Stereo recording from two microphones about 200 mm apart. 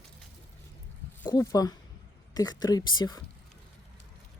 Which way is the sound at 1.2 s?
20° left (ahead or behind).